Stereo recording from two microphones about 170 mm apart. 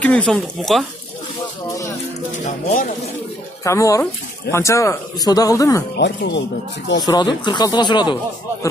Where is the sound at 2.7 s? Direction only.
45° left (ahead or behind).